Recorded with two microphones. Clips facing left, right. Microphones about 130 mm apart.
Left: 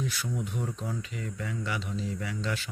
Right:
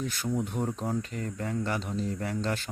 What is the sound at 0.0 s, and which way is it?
Speech, 45° right (ahead or behind).